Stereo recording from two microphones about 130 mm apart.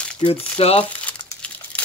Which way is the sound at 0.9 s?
10° left (ahead or behind).